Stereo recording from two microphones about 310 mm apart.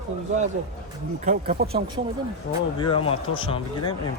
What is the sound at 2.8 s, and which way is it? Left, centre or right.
Speech, centre.